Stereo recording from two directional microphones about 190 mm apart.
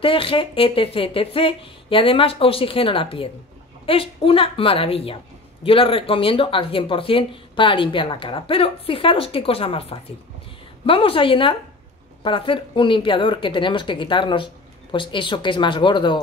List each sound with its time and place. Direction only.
0.0 s a woman's voice: 30° left (ahead or behind)